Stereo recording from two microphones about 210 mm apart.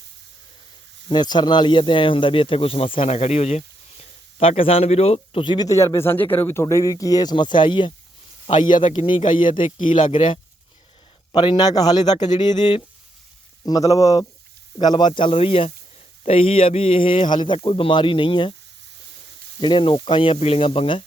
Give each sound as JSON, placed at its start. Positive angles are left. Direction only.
{"t": 1.0, "sound": "a man's voice", "side_deg": 20}
{"t": 10.0, "sound": "a man's voice", "side_deg": 25}
{"t": 11.3, "sound": "a man's voice", "side_deg": 20}
{"t": 19.5, "sound": "a man's voice", "side_deg": 20}